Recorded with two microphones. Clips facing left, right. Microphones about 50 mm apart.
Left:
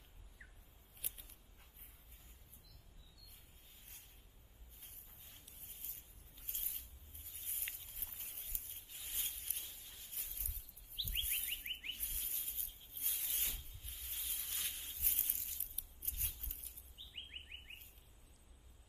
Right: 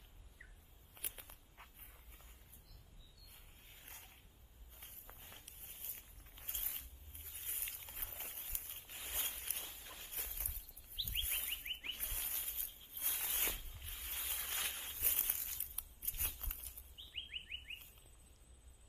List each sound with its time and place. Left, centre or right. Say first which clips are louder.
0.9 s walk: right 4 dB; right
3.7 s vehicle: right 7 dB; right
7.7 s a sound: right 5 dB; right
9.3 s walk: right 4 dB; right
11.2 s alarm: even; right
13.7 s boat: right 4 dB; right
14.2 s a sound: right 4 dB; right
16.9 s chirp: right 3 dB; right